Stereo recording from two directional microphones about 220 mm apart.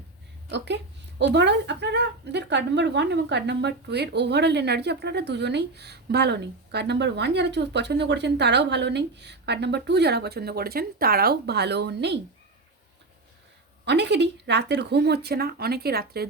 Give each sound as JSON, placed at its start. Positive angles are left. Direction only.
{"t": 0.5, "sound": "speech", "side_deg": -50}
{"t": 13.8, "sound": "speech", "side_deg": -50}